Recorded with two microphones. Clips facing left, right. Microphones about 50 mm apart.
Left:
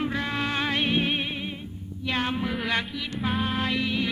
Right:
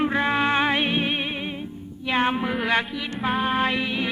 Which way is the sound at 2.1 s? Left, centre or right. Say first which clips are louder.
Right 5 dB; right.